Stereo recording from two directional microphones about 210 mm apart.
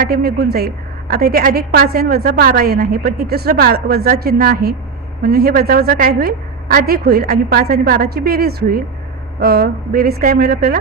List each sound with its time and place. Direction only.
0.0 s a woman's voice: 45° right (ahead or behind)